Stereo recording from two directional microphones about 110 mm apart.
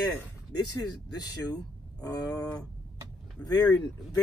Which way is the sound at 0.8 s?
35° left (ahead or behind).